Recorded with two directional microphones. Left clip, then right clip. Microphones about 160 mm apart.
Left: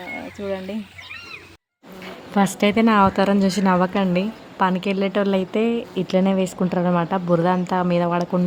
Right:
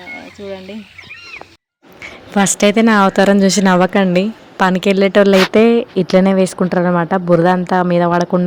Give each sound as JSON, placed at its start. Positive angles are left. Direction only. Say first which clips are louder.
{"t": 0.1, "sound": "speech", "louder": "even", "side_deg": 5}
{"t": 2.0, "sound": "speech", "louder": "right 5 dB", "side_deg": -20}